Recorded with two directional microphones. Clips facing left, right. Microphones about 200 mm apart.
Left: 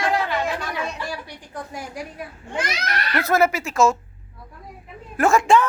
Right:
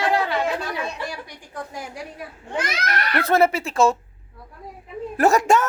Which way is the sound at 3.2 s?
30° right (ahead or behind).